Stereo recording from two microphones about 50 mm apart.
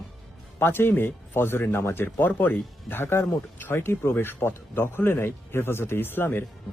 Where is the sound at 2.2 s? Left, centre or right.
Left.